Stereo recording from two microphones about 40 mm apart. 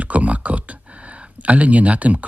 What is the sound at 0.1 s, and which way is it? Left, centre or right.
Speech, right.